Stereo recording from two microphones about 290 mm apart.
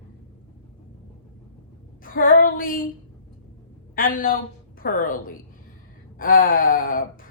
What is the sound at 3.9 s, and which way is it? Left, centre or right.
A woman's voice, left.